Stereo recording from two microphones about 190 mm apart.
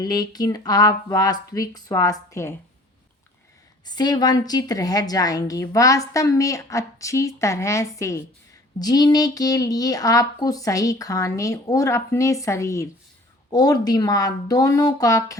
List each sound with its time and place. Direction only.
0.0 s speech: 20° left (ahead or behind)
3.8 s a woman's voice: 20° left (ahead or behind)